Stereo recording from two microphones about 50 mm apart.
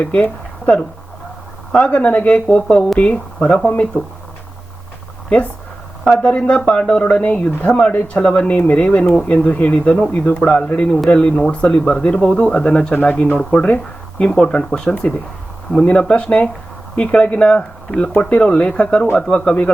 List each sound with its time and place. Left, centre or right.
0.0 s speech: left
6.1 s speech: centre
10.1 s a man's voice: left
10.4 s speech: left